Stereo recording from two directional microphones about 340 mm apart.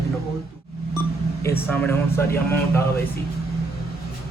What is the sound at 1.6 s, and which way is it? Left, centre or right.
Speech, centre.